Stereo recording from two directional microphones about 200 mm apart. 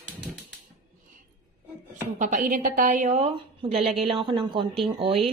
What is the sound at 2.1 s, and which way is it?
A woman's voice, 40° right (ahead or behind).